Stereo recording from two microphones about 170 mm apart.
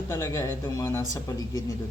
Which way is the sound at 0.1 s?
15° left (ahead or behind).